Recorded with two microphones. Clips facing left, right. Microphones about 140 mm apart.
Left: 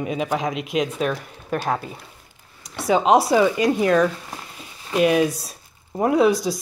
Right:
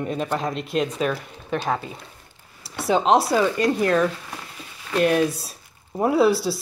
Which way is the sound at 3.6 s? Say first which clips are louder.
Left 2 dB; centre (ahead or behind).